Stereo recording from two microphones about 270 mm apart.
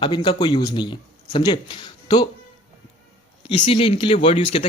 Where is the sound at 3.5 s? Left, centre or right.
Centre.